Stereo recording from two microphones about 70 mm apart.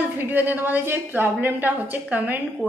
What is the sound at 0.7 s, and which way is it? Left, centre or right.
A woman's voice, right.